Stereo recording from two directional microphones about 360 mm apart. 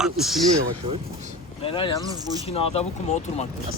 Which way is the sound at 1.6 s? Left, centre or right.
Centre.